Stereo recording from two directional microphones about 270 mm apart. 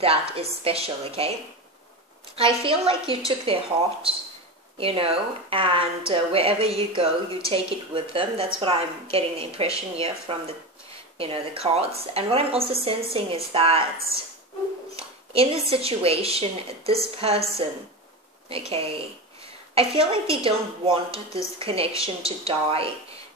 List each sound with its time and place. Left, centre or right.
0.0 s speech: right
2.3 s speech: centre
4.7 s speech: right
15.0 s speech: right
18.7 s speech: right
21.1 s speech: centre
21.5 s speech: right